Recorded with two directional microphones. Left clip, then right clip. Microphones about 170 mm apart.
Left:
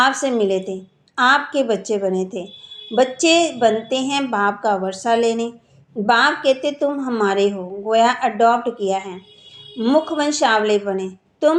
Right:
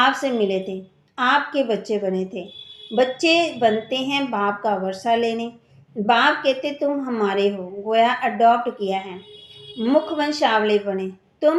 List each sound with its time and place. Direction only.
0.0 s a woman's voice: 30° left (ahead or behind)